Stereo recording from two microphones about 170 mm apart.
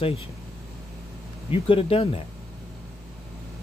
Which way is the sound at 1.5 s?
35° left (ahead or behind).